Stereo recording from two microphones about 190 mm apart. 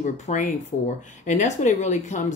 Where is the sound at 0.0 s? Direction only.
40° left (ahead or behind).